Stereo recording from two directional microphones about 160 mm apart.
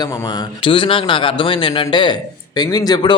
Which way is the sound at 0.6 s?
35° left (ahead or behind).